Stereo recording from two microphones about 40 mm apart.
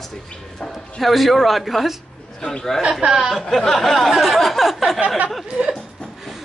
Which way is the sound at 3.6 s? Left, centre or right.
Centre.